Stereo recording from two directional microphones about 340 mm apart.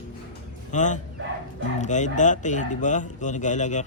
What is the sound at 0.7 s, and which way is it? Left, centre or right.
Speech, left.